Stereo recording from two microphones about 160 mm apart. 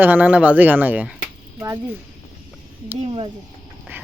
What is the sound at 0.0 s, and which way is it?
Speech, 10° right (ahead or behind).